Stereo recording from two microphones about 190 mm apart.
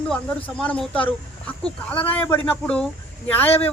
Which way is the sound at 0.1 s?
5° left (ahead or behind).